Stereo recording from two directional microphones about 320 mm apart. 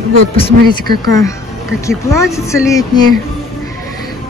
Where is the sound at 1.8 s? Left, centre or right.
Centre.